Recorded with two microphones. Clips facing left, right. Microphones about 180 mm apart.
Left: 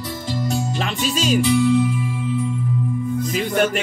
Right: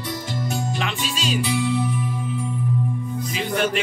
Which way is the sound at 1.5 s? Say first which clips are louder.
Left 7 dB; centre (ahead or behind).